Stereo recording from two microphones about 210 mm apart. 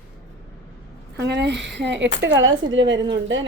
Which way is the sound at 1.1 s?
55° right (ahead or behind).